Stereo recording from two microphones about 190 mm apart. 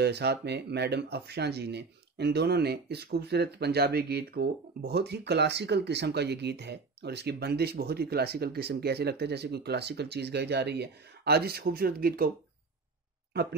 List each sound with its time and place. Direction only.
0.0 s speech: 60° right (ahead or behind)
13.3 s speech: 60° right (ahead or behind)